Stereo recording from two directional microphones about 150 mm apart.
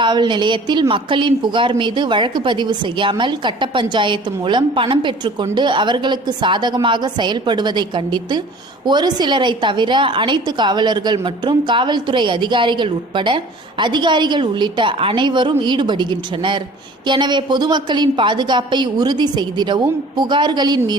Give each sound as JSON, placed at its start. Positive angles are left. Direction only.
{"t": 0.0, "sound": "a woman's voice", "side_deg": -30}